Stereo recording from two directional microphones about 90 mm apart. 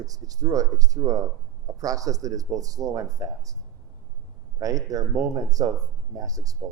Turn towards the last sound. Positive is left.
turn(degrees=-40)  # may be behind; listen again after turning